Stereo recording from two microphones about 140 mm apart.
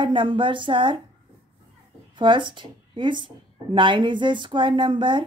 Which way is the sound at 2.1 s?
35° right (ahead or behind).